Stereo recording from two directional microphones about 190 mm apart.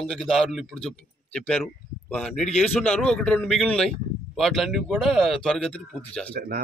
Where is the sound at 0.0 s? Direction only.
Centre (ahead or behind).